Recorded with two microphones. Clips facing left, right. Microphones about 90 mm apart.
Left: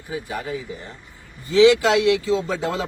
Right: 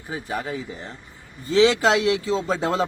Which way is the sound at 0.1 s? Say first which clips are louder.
Even; 35° right (ahead or behind).